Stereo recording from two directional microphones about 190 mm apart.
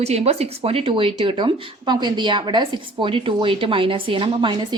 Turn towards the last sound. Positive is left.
turn(degrees=-25)  # may be behind; listen again after turning